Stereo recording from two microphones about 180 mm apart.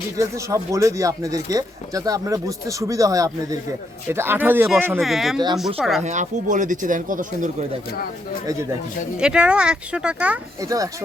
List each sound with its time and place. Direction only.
0.2 s speech: 15° right (ahead or behind)
4.9 s speech: centre (ahead or behind)
6.0 s speech: 40° right (ahead or behind)
9.1 s speech: 5° right (ahead or behind)
10.6 s speech: 20° right (ahead or behind)